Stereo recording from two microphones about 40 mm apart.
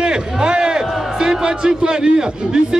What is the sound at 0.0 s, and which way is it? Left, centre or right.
Music, right.